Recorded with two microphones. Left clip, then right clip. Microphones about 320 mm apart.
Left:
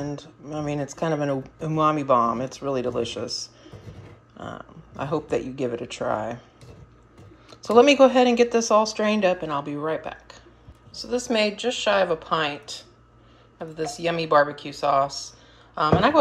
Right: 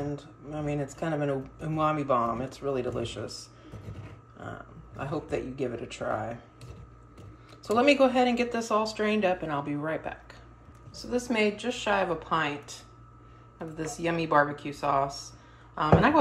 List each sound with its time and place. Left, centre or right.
0.1 s speech: centre
4.4 s speech: centre
7.6 s speech: centre
13.9 s speech: centre